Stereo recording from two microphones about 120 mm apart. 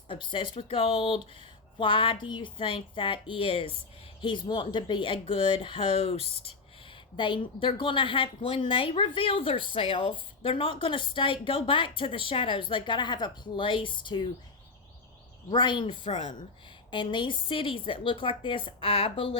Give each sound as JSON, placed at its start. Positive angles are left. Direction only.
{"t": 0.1, "sound": "a woman's voice", "side_deg": 45}
{"t": 7.2, "sound": "a woman's voice", "side_deg": 45}
{"t": 15.4, "sound": "a woman's voice", "side_deg": 40}